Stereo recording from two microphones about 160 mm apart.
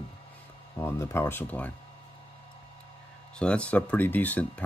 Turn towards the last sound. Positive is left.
turn(degrees=10)  # may be behind; listen again after turning